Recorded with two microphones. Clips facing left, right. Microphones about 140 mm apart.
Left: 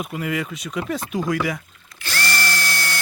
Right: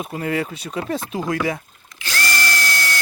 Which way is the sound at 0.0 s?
30° right (ahead or behind).